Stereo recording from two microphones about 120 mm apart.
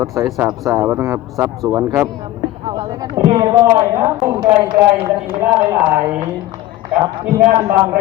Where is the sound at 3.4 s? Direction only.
35° right (ahead or behind); by 5.1 s 20° right (ahead or behind).